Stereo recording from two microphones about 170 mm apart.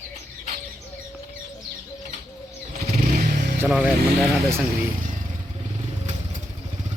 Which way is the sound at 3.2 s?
55° right (ahead or behind).